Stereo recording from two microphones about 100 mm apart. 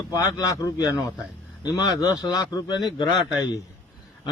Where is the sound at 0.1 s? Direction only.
35° left (ahead or behind).